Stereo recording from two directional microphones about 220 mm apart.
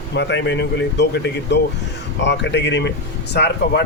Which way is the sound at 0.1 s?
50° left (ahead or behind).